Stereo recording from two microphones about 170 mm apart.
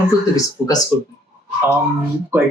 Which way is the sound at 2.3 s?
15° right (ahead or behind).